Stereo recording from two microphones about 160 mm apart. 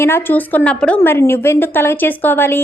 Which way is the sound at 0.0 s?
15° left (ahead or behind).